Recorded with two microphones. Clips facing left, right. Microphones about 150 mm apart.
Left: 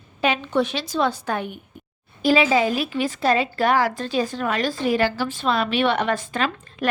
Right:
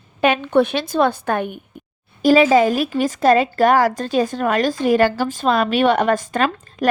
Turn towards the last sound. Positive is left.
turn(degrees=-45)  # may be behind; listen again after turning